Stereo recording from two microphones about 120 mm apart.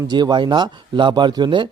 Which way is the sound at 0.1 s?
40° right (ahead or behind).